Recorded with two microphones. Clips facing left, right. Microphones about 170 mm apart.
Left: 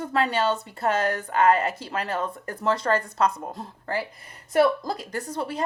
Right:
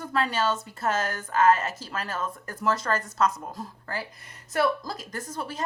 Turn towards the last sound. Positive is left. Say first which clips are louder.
# left 5 dB
turn(degrees=30)  # may be behind; listen again after turning